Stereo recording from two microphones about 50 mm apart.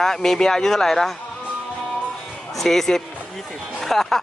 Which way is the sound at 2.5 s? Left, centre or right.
Centre.